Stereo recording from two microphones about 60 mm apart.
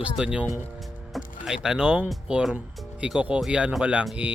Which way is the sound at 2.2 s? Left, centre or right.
Centre.